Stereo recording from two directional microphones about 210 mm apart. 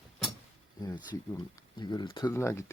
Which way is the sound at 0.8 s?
20° left (ahead or behind).